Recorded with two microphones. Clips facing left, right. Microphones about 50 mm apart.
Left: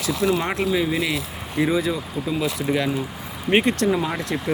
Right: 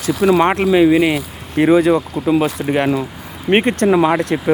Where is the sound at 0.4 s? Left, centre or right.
Right.